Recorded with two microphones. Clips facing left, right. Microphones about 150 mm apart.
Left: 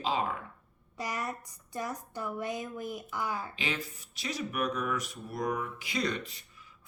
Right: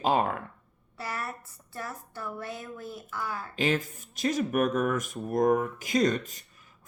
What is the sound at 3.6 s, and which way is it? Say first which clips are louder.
Speech: right 8 dB; 50° right (ahead or behind).